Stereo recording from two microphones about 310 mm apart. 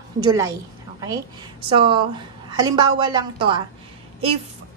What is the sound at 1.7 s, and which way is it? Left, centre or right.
A woman's voice, centre.